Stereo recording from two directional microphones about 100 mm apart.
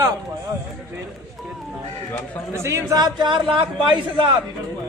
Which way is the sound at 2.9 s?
45° right (ahead or behind).